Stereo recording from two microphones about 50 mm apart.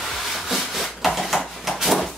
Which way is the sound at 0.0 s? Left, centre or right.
Centre.